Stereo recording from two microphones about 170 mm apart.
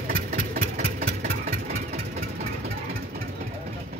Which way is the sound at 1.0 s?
55° right (ahead or behind).